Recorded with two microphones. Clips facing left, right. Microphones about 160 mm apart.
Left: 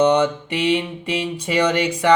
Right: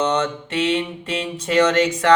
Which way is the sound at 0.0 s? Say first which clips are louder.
Left 5 dB; 10° left (ahead or behind).